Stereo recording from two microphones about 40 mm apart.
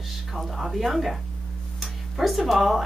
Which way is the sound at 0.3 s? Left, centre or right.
Centre.